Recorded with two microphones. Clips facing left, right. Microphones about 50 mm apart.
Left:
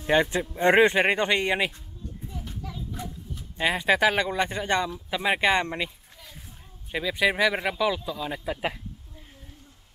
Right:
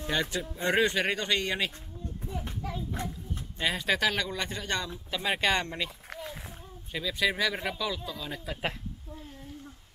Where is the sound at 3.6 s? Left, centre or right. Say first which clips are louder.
Left 6 dB; centre.